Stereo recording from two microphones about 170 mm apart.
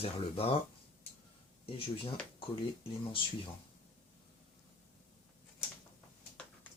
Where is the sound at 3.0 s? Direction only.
30° left (ahead or behind).